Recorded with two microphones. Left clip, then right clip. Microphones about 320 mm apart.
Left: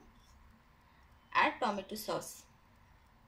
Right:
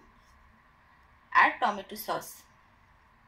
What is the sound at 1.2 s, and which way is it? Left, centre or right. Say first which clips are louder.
Speech: right 8 dB; centre.